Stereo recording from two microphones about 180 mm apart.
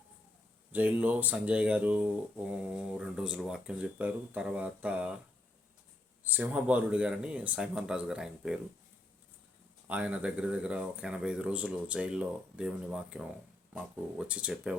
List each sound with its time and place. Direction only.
0.7 s speech: 10° right (ahead or behind)
6.2 s speech: 10° right (ahead or behind)
9.8 s speech: 5° right (ahead or behind)